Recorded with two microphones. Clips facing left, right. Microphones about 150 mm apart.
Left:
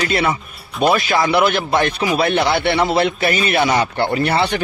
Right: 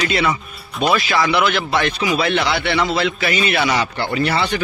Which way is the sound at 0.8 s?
50° left (ahead or behind).